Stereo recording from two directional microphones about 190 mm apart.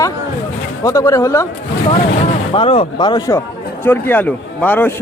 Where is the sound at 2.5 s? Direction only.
30° left (ahead or behind); by 5.0 s 10° left (ahead or behind).